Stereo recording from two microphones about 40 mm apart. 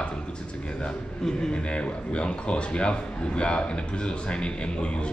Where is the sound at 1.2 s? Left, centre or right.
Centre.